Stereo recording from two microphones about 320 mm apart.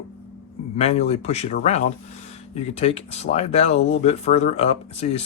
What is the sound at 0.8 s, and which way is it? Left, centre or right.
Speech, left.